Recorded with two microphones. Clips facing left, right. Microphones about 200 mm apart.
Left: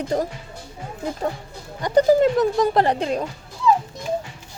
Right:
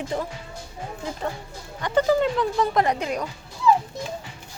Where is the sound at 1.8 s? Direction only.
40° left (ahead or behind).